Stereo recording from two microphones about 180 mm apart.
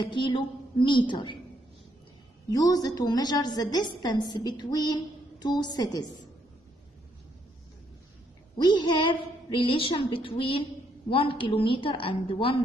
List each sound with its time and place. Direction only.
0.0 s a woman's voice: 25° left (ahead or behind)
2.5 s a woman's voice: 20° left (ahead or behind)
8.5 s a woman's voice: 25° left (ahead or behind)